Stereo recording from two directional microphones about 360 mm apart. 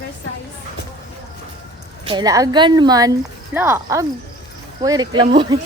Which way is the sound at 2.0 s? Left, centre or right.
Centre.